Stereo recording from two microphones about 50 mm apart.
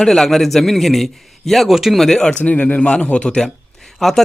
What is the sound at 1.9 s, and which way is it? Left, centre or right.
Speech, centre.